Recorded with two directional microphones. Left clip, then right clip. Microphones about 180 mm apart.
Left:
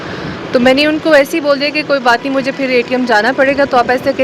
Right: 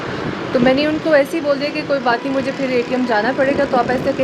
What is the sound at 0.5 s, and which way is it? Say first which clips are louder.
A woman's voice: left 5 dB; 25° left (ahead or behind).